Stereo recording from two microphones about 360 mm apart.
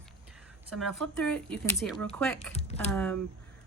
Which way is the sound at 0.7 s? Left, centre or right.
Centre.